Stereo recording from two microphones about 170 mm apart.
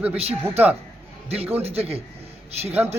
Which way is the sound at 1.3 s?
35° right (ahead or behind).